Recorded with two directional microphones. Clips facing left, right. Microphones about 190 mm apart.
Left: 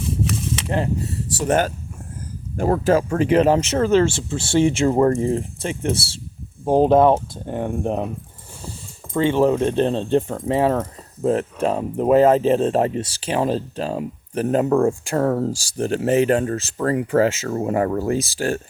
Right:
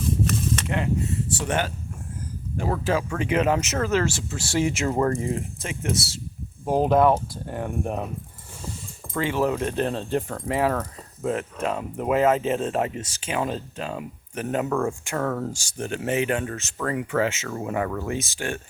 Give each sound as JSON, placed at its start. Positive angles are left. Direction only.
{"t": 0.7, "sound": "speech", "side_deg": 35}
{"t": 9.1, "sound": "speech", "side_deg": 25}